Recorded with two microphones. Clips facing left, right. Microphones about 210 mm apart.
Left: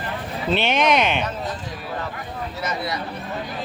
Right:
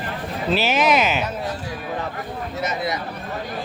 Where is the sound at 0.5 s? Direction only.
5° right (ahead or behind).